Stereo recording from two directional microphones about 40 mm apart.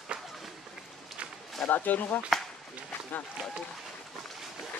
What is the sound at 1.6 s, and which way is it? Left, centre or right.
Speech, left.